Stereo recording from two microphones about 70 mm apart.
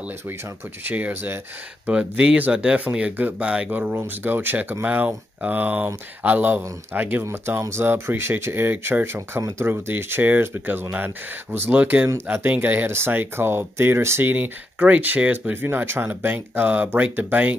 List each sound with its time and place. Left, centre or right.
0.8 s speech: right
7.2 s speech: right
14.3 s speech: right